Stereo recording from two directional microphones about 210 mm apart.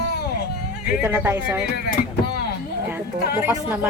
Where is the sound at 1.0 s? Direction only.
10° right (ahead or behind).